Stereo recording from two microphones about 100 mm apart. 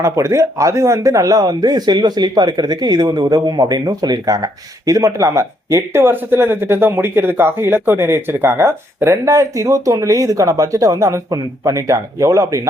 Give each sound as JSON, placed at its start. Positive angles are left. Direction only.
{"t": 0.0, "sound": "speech", "side_deg": -30}